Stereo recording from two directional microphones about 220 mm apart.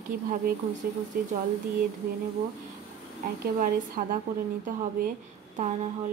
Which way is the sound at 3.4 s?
40° right (ahead or behind).